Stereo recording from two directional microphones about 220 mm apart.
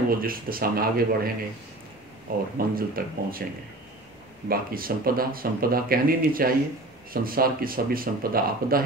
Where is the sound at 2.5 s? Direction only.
40° right (ahead or behind).